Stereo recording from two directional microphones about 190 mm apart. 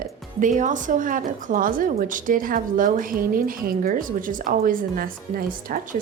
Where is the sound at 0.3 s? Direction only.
40° right (ahead or behind).